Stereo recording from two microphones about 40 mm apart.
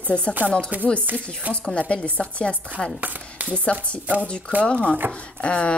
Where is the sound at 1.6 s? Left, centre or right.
Left.